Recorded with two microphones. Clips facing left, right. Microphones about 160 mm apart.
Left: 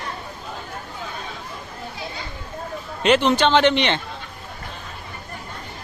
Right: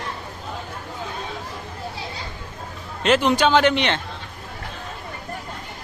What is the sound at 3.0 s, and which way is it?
Speech, centre (ahead or behind).